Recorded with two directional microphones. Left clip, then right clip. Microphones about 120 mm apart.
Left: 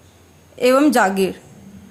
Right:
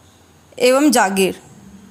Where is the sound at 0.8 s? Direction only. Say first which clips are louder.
Right 1 dB; 25° right (ahead or behind).